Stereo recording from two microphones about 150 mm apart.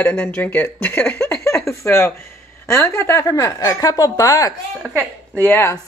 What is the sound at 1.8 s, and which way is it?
A woman's voice, 15° left (ahead or behind).